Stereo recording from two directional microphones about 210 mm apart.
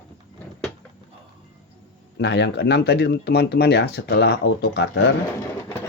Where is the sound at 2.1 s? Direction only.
55° left (ahead or behind).